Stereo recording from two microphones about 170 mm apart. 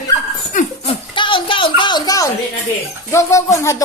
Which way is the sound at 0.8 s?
30° left (ahead or behind).